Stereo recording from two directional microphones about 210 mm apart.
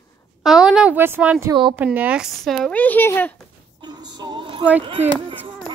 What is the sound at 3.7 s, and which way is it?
Music, 20° right (ahead or behind).